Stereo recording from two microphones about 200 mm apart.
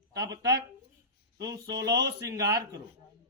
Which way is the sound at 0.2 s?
20° right (ahead or behind).